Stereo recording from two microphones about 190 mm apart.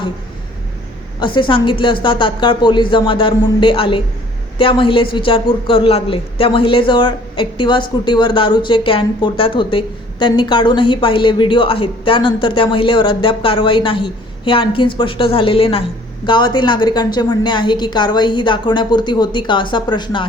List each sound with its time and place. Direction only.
1.2 s a woman's voice: 25° left (ahead or behind)